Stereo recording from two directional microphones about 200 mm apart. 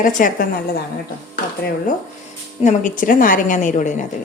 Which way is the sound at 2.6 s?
40° left (ahead or behind).